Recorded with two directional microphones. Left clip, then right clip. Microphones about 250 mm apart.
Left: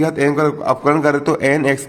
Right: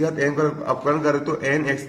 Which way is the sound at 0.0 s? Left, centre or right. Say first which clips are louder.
Left 5 dB; left.